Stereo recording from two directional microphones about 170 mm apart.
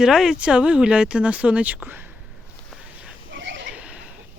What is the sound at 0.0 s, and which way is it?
Speech, 5° right (ahead or behind).